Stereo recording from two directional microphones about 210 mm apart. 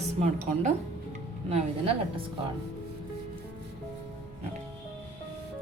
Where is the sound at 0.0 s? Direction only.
30° right (ahead or behind).